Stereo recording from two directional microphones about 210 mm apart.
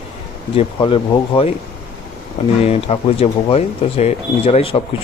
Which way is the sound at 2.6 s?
30° left (ahead or behind).